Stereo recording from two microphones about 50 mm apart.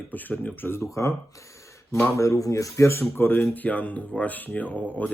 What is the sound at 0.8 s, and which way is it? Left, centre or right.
Speech, left.